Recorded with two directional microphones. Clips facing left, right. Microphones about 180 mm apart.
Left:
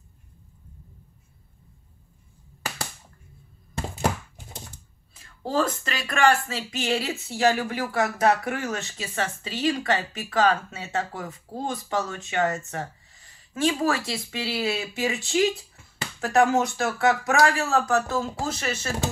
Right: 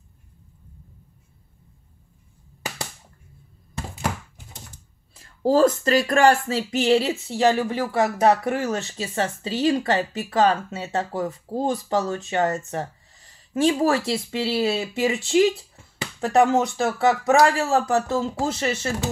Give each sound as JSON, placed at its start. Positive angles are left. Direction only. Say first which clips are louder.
{"t": 5.2, "sound": "speech", "louder": "right 8 dB", "side_deg": -40}